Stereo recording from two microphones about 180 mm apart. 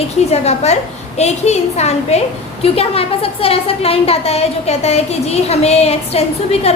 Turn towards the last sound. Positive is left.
turn(degrees=35)  # may be behind; listen again after turning